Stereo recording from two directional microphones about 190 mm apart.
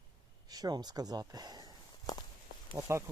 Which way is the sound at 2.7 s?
15° right (ahead or behind).